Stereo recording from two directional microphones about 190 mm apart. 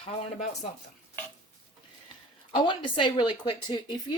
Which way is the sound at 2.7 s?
25° left (ahead or behind).